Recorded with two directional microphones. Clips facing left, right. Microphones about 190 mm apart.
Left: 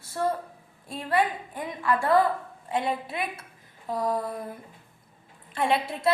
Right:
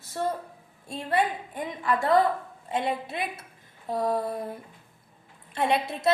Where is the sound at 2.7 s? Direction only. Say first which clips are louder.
Even; 20° right (ahead or behind).